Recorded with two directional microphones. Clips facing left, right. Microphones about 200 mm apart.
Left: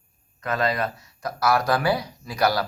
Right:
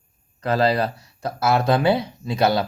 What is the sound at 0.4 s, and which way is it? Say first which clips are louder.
Speech: right 5 dB; 30° right (ahead or behind).